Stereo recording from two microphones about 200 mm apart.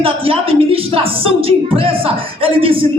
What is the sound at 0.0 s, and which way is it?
Speech, 30° right (ahead or behind).